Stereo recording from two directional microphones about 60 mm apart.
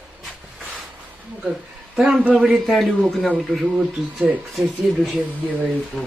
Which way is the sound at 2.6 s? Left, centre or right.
Centre.